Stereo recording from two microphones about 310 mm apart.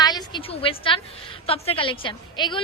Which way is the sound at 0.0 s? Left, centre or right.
Centre.